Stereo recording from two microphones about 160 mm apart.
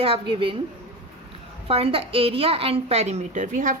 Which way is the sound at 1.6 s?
35° right (ahead or behind).